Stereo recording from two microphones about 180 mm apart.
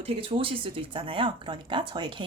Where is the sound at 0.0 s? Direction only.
30° right (ahead or behind).